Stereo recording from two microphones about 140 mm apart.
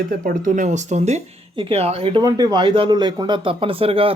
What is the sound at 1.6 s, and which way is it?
Speech, 45° right (ahead or behind).